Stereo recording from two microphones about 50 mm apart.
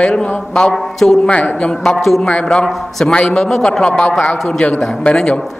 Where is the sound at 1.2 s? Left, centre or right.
Left.